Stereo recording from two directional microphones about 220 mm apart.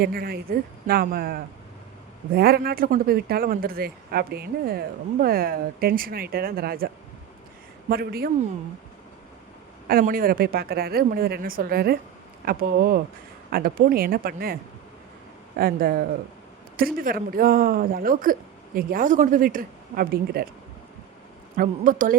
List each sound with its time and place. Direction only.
0.0 s speech: 45° right (ahead or behind)
9.9 s speech: 40° right (ahead or behind)
21.5 s speech: 40° right (ahead or behind)